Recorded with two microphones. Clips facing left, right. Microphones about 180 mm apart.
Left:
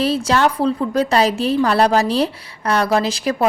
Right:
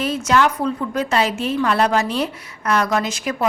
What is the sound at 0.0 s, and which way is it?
A woman's voice, 30° left (ahead or behind).